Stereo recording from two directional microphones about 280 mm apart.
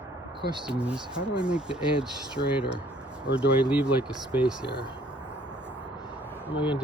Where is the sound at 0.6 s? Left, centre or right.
Centre.